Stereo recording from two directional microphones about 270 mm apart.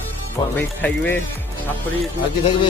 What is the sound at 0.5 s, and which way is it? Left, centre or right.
Speech, centre.